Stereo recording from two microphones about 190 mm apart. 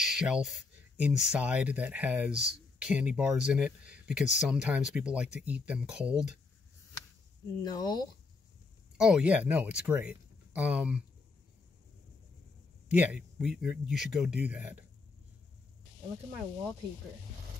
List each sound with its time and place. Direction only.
0.0 s speech: 5° right (ahead or behind)
7.6 s speech: 20° left (ahead or behind)
8.9 s speech: 5° right (ahead or behind)
12.9 s speech: 5° right (ahead or behind)